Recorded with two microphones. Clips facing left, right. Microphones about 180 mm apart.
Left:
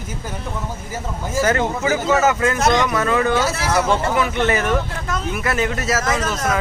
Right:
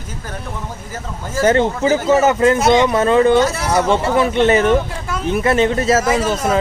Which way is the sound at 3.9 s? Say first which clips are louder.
Right 4 dB; 25° right (ahead or behind).